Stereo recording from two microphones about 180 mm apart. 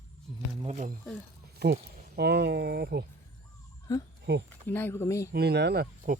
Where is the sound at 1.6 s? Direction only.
65° right (ahead or behind).